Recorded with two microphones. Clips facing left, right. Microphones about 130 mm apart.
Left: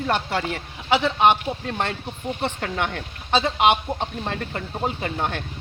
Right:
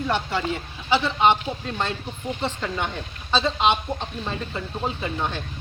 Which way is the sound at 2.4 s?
65° left (ahead or behind).